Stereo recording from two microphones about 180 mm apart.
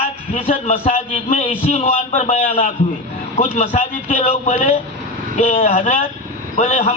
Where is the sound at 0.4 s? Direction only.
45° left (ahead or behind).